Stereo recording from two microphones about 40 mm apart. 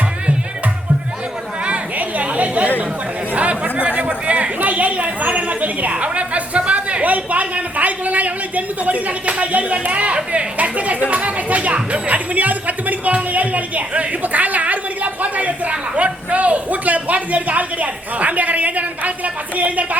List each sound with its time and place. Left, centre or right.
1.6 s chatter: right